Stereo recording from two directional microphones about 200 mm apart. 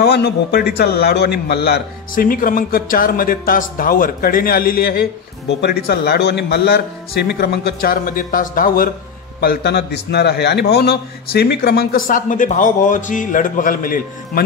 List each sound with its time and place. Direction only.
0.0 s a man's voice: 55° left (ahead or behind)